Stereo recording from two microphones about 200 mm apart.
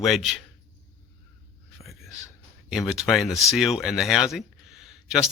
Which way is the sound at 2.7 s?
Centre (ahead or behind).